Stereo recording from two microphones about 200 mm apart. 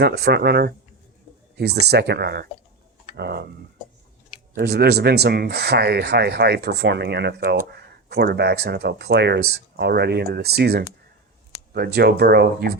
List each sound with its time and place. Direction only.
0.0 s speech: 55° right (ahead or behind)
4.5 s speech: 55° right (ahead or behind)